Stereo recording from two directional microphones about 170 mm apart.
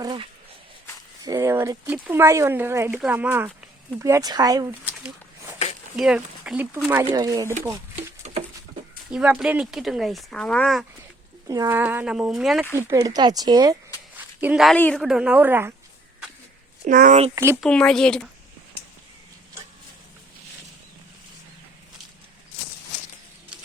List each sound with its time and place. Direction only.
0.0 s speech: 30° right (ahead or behind)
6.0 s speech: 5° right (ahead or behind)
7.0 s speech: 25° right (ahead or behind)
8.2 s patter: 40° right (ahead or behind)
9.0 s speech: 5° right (ahead or behind)
11.4 s speech: 20° right (ahead or behind); by 12.6 s centre (ahead or behind)
12.7 s speech: 20° right (ahead or behind)
14.2 s a sound: 5° right (ahead or behind)
14.8 s a woman's voice: 10° left (ahead or behind)
15.0 s speech: 5° right (ahead or behind)
16.8 s speech: 50° right (ahead or behind)
17.3 s speech: 15° right (ahead or behind)
17.6 s speech: 5° left (ahead or behind)